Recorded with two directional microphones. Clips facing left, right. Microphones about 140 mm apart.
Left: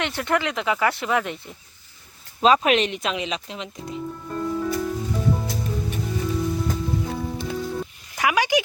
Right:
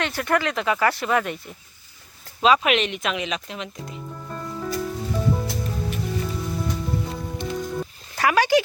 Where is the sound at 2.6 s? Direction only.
30° left (ahead or behind).